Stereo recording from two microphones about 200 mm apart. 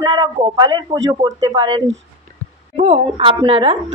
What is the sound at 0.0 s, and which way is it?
Speech, 20° right (ahead or behind).